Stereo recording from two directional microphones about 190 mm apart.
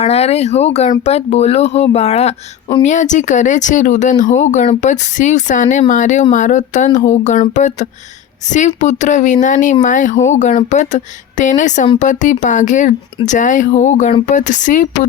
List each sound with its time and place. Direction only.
0.0 s speech: 35° left (ahead or behind)